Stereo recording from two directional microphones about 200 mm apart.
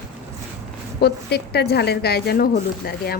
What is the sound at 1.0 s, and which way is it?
A woman's voice, 55° left (ahead or behind).